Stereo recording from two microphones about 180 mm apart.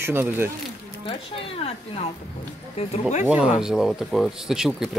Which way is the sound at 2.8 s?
40° left (ahead or behind).